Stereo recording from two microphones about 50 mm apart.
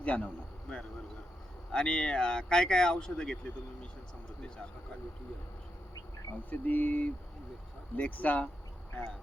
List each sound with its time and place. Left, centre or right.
0.0 s speech: left
0.7 s speech: centre
4.4 s speech: centre
6.3 s a sound: left
7.9 s speech: left